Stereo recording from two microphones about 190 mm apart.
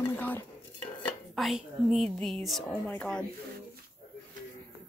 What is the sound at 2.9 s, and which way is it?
Speech, 5° left (ahead or behind).